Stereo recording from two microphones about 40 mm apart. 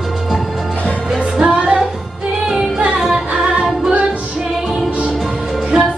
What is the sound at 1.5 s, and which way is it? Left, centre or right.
Music, right.